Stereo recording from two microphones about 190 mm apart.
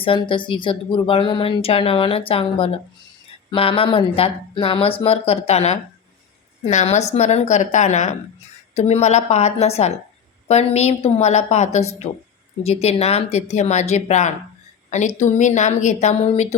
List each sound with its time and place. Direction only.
0.0 s speech: 25° left (ahead or behind)